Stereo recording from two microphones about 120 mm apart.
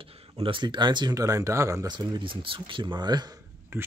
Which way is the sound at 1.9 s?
40° right (ahead or behind).